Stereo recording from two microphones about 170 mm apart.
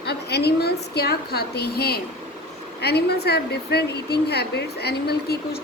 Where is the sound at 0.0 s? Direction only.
75° left (ahead or behind).